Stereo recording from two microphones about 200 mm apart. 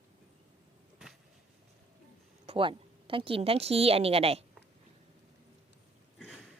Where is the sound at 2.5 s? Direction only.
25° right (ahead or behind).